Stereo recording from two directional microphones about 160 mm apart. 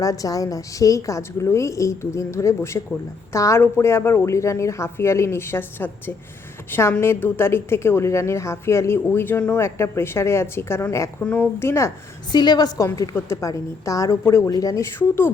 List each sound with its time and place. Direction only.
0.0 s a woman's voice: 20° left (ahead or behind)
12.3 s a woman's voice: 25° left (ahead or behind)